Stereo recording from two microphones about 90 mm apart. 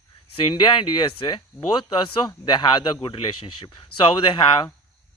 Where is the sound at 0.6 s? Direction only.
60° left (ahead or behind).